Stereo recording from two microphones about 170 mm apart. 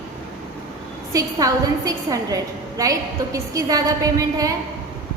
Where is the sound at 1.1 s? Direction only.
20° right (ahead or behind).